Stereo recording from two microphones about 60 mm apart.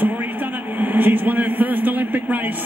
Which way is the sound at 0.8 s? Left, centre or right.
Right.